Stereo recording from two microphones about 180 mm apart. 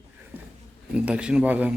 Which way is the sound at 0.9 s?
5° right (ahead or behind).